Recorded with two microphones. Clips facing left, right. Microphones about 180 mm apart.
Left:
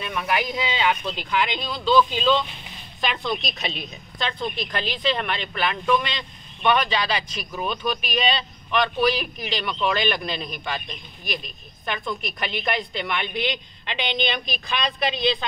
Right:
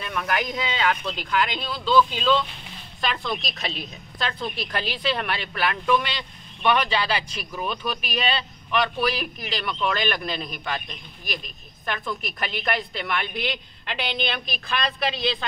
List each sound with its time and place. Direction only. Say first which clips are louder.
0.0 s a woman's voice: left 1 dB; 5° left (ahead or behind)